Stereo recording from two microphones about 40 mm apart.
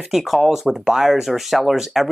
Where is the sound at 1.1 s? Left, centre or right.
Centre.